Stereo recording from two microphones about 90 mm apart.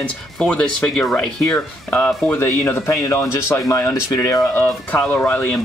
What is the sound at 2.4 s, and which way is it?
Speech, 25° left (ahead or behind).